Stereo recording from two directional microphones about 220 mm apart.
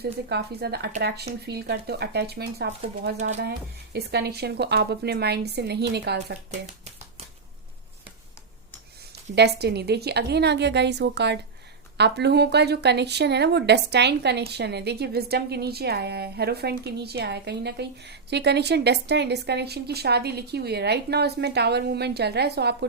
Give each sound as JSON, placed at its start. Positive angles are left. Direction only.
{"t": 0.0, "sound": "speech", "side_deg": -50}
{"t": 3.2, "sound": "speech", "side_deg": -30}
{"t": 3.9, "sound": "speech", "side_deg": -45}
{"t": 9.3, "sound": "speech", "side_deg": -50}